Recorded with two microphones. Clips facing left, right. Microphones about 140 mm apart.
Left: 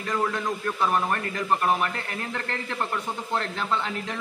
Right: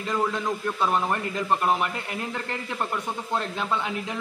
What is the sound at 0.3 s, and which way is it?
Speech, 15° right (ahead or behind).